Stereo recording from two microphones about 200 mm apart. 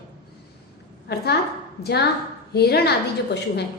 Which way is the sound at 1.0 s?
55° left (ahead or behind).